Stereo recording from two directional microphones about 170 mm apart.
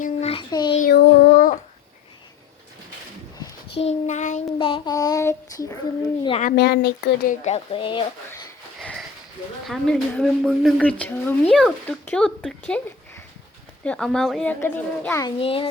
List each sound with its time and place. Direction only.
0.0 s a sound: 40° left (ahead or behind)
0.8 s child singing: 70° left (ahead or behind)
3.8 s child singing: 40° left (ahead or behind)
4.5 s child singing: 30° left (ahead or behind)
6.6 s speech: 75° left (ahead or behind)
7.3 s speech: 40° left (ahead or behind)
8.8 s sniff: 5° left (ahead or behind)
9.6 s a woman's voice: centre (ahead or behind)
15.2 s speech: 30° left (ahead or behind)